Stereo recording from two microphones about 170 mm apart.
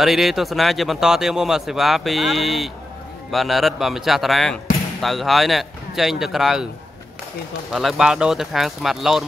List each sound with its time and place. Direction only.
0.0 s speech: centre (ahead or behind)
7.7 s speech: 5° right (ahead or behind)